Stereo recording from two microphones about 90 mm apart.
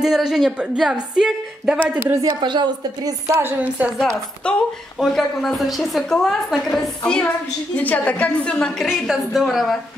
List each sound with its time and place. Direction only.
0.0 s a woman's voice: 5° right (ahead or behind)
1.8 s speech: 20° right (ahead or behind)
2.2 s a woman's voice: 60° right (ahead or behind); by 3.5 s 30° right (ahead or behind)
3.5 s a woman's voice: 15° right (ahead or behind)
4.4 s a woman's voice: 10° left (ahead or behind)
8.8 s a woman's voice: 5° right (ahead or behind)